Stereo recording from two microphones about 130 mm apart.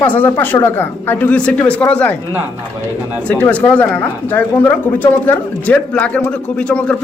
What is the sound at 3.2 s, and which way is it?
Speech, 10° left (ahead or behind).